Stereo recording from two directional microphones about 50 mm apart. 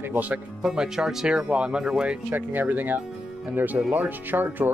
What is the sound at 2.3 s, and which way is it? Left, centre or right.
Speech, right.